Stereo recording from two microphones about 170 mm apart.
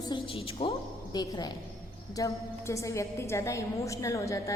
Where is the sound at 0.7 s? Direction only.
25° left (ahead or behind).